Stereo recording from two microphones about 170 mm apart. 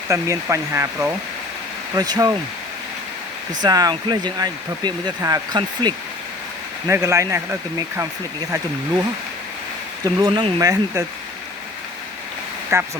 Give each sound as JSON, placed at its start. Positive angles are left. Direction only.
{"t": 0.1, "sound": "speech", "side_deg": -20}
{"t": 3.6, "sound": "speech", "side_deg": -25}
{"t": 10.2, "sound": "speech", "side_deg": -25}
{"t": 12.7, "sound": "speech", "side_deg": -15}